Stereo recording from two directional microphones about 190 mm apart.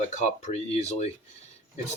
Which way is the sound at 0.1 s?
35° left (ahead or behind).